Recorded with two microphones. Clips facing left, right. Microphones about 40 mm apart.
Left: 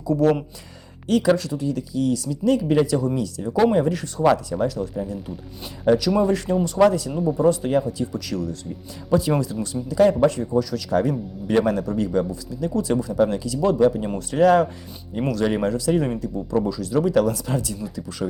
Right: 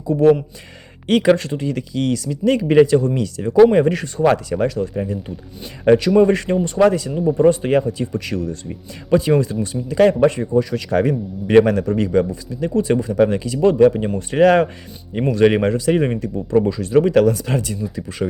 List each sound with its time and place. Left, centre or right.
1.0 s speech: right
2.6 s speech: right
3.2 s speech: right
14.2 s speech: right